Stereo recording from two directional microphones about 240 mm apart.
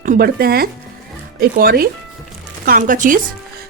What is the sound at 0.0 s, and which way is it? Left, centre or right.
Speech, right.